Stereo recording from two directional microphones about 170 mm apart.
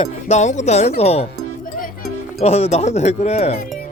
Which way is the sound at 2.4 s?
40° left (ahead or behind).